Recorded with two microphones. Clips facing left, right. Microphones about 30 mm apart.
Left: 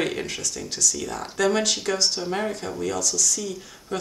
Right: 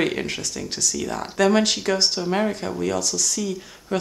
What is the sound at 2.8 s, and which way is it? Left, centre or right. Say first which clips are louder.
Speech: right 1 dB; right.